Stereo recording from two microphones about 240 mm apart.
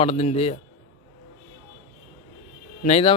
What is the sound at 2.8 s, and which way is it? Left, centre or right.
Speech, left.